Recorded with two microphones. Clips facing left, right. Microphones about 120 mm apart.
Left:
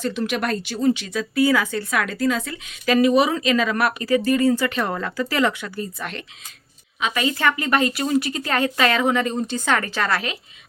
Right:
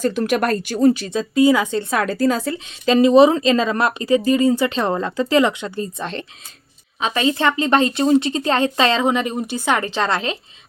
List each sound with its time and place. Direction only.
0.0 s speech: 45° right (ahead or behind); by 10.3 s 25° right (ahead or behind)